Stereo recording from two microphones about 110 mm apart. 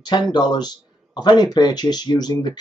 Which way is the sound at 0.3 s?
40° left (ahead or behind).